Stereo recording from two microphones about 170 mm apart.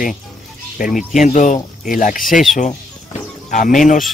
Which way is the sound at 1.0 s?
Centre (ahead or behind).